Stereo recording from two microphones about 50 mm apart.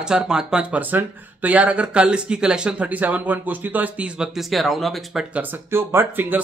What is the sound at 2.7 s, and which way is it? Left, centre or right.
Speech, right.